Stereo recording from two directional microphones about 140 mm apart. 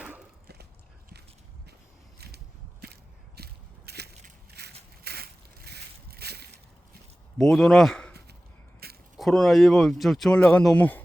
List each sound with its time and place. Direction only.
7.3 s speech: centre (ahead or behind)
8.8 s a sound: 90° right
9.1 s speech: centre (ahead or behind)